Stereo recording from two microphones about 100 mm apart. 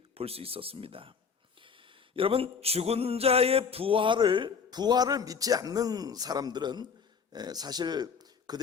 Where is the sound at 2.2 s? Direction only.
65° right (ahead or behind).